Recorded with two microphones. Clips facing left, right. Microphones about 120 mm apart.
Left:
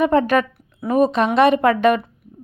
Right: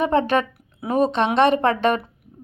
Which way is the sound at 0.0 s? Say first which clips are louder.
Left 3 dB; 25° right (ahead or behind).